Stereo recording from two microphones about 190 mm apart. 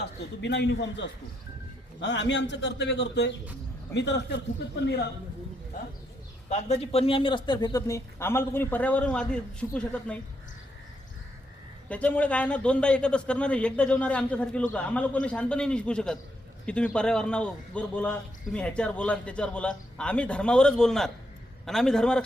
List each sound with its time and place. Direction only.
0.0 s a man's voice: 65° left (ahead or behind)
6.5 s speech: 35° left (ahead or behind); by 10.2 s 5° left (ahead or behind)
11.9 s a man's voice: 5° left (ahead or behind)